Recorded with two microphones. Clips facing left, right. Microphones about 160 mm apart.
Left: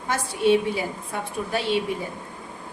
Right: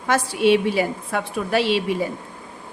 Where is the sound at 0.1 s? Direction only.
90° right.